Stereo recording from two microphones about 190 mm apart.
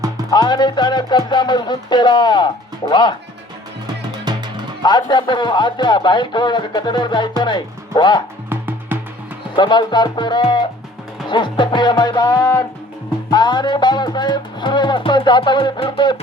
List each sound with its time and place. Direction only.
0.3 s speech: 20° left (ahead or behind)
4.1 s music: 20° right (ahead or behind)
4.8 s speech: 25° left (ahead or behind)
8.4 s music: 10° right (ahead or behind)
9.6 s speech: 25° left (ahead or behind)